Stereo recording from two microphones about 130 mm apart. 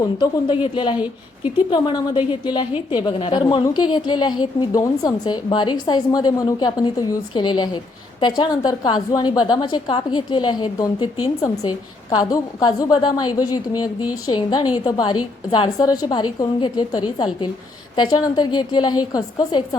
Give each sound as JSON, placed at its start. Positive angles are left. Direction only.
{"t": 0.2, "sound": "a woman's voice", "side_deg": 40}